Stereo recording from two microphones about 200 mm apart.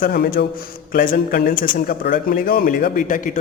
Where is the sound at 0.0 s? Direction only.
45° left (ahead or behind).